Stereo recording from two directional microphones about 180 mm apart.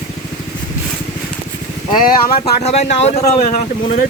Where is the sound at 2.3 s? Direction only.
35° left (ahead or behind).